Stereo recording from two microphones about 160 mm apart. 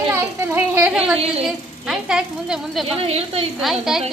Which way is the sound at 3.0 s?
40° right (ahead or behind).